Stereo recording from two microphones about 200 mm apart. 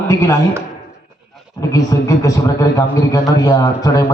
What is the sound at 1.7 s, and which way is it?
A man's voice, 15° left (ahead or behind).